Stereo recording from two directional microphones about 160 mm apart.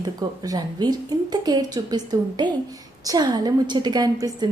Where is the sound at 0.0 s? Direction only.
25° right (ahead or behind).